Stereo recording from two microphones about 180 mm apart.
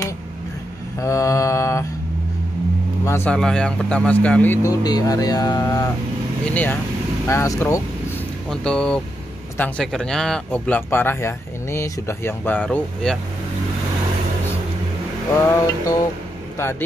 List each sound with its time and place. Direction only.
1.0 s speech: 15° left (ahead or behind)
3.1 s speech: 10° left (ahead or behind)
4.6 s speech: 20° left (ahead or behind)
6.5 s speech: 10° left (ahead or behind)
8.5 s speech: 5° left (ahead or behind)
15.4 s speech: 20° left (ahead or behind)